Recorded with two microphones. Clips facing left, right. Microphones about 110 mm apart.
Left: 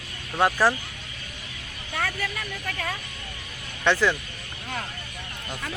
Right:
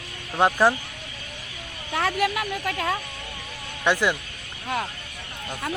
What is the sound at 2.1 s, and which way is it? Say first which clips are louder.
Speech: right 8 dB; 70° right (ahead or behind).